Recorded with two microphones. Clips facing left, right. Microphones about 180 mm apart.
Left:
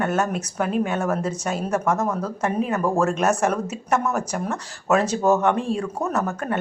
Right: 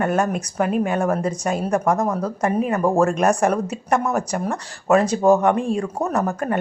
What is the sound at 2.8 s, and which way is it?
Speech, 15° right (ahead or behind).